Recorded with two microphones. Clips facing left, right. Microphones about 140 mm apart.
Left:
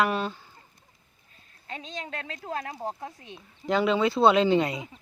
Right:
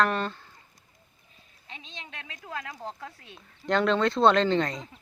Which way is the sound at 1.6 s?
45° left (ahead or behind).